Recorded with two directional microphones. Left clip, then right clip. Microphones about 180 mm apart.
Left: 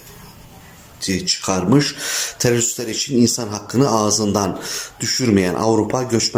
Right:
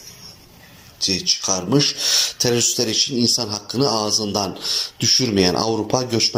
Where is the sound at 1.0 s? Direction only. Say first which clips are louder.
Right 2 dB; 30° left (ahead or behind).